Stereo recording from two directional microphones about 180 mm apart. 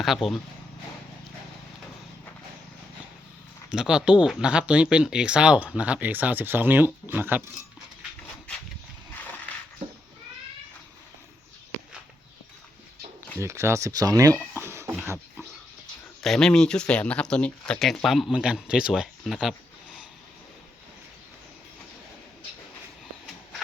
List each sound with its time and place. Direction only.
0.0 s speech: centre (ahead or behind)
3.7 s speech: 5° right (ahead or behind)
13.4 s speech: 15° right (ahead or behind)
14.6 s cat: 15° right (ahead or behind)
16.2 s speech: centre (ahead or behind)